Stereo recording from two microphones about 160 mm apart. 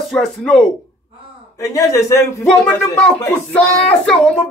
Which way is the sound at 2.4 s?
5° left (ahead or behind).